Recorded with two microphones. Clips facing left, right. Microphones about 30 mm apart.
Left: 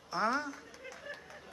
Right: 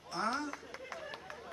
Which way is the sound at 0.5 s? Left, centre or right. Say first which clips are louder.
Right 3 dB; right.